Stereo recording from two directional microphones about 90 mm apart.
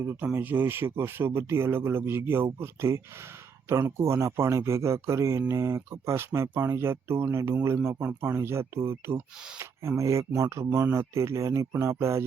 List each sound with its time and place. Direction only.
0.3 s speech: 20° right (ahead or behind)